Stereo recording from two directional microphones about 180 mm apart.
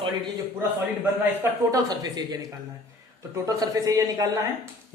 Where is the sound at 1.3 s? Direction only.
10° right (ahead or behind).